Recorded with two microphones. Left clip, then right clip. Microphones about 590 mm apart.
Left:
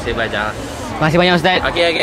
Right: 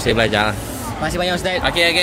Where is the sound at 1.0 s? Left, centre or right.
Centre.